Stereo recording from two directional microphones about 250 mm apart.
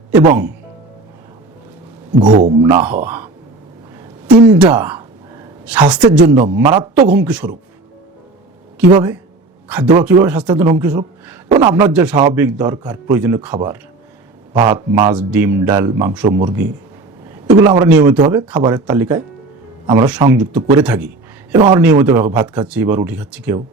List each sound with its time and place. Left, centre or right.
2.3 s a man's voice: right
2.6 s a man's voice: centre
4.4 s a sound: centre
6.0 s a man's voice: centre
7.1 s speech: centre
8.9 s a man's voice: centre
14.5 s a man's voice: centre